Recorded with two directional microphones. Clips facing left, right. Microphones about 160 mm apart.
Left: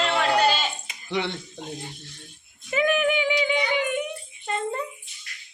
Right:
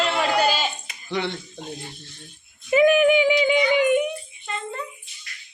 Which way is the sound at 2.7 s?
15° right (ahead or behind).